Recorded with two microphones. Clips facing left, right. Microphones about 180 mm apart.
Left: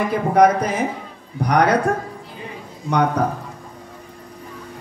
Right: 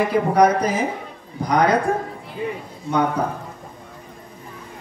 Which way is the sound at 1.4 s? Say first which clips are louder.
Left 1 dB; 70° left (ahead or behind).